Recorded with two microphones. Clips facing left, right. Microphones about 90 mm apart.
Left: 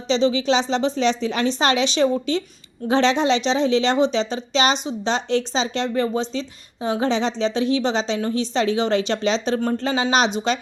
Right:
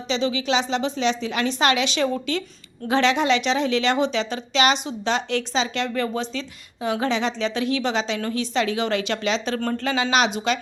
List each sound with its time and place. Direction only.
0.1 s a woman's voice: 30° left (ahead or behind)